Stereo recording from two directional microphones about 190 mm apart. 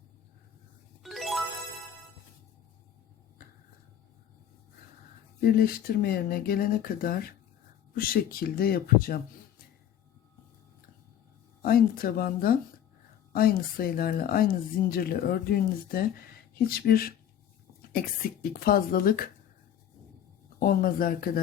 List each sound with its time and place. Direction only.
1.0 s music: centre (ahead or behind)
5.4 s speech: 50° left (ahead or behind)
11.6 s speech: 50° left (ahead or behind)
20.6 s speech: 50° left (ahead or behind)